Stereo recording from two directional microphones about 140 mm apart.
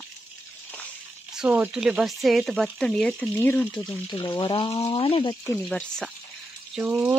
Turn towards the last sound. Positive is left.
turn(degrees=-15)  # may be behind; listen again after turning